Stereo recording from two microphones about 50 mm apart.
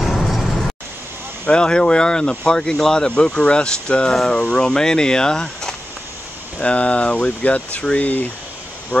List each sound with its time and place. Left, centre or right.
0.0 s vehicle: centre
1.4 s speech: centre
6.6 s speech: left